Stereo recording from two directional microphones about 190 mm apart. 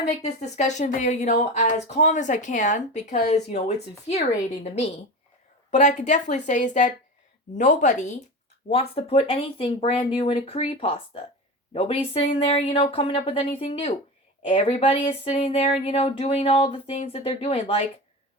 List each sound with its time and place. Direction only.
0.1 s speech: 35° left (ahead or behind)